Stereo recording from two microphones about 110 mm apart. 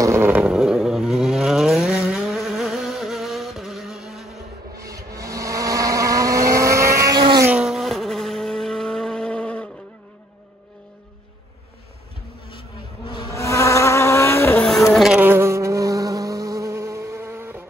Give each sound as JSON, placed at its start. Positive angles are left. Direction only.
{"t": 0.0, "sound": "vehicle", "side_deg": -20}
{"t": 0.4, "sound": "vehicle", "side_deg": -5}
{"t": 4.8, "sound": "vehicle", "side_deg": -30}
{"t": 7.6, "sound": "vehicle", "side_deg": 0}
{"t": 12.4, "sound": "vehicle", "side_deg": 50}
{"t": 13.3, "sound": "vehicle", "side_deg": 30}
{"t": 14.6, "sound": "a sound", "side_deg": 0}
{"t": 15.1, "sound": "insect", "side_deg": -20}